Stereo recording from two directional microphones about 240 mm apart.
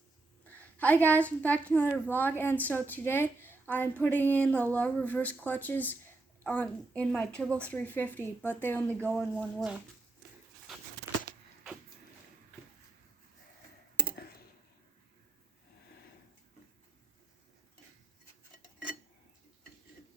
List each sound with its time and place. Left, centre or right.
0.4 s a woman's voice: centre